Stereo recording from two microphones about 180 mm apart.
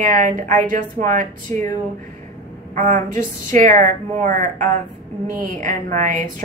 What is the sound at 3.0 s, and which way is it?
A woman's voice, 45° right (ahead or behind).